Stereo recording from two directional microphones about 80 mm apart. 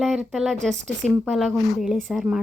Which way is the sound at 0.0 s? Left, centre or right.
Centre.